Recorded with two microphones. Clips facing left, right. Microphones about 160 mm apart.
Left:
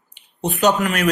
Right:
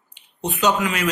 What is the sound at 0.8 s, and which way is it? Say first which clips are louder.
Speech: left 3 dB; 60° left (ahead or behind).